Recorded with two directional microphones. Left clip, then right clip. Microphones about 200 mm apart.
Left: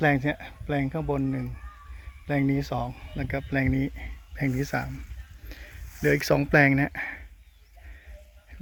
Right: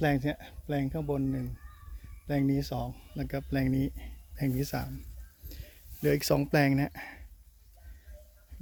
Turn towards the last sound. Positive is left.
turn(degrees=-5)  # may be behind; listen again after turning